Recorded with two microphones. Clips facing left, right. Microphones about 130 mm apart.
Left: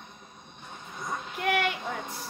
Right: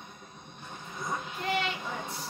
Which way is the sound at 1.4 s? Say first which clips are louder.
Left 5 dB; 65° left (ahead or behind).